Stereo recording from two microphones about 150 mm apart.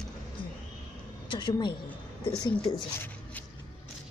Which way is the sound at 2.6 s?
10° left (ahead or behind).